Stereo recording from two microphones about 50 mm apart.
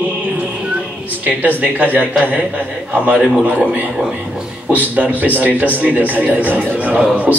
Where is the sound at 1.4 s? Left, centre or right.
Right.